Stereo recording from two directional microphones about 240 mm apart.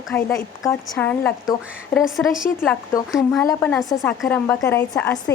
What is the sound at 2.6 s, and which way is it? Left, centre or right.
A woman's voice, centre.